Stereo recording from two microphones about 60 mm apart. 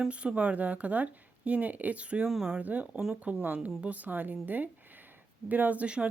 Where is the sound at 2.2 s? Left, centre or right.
Centre.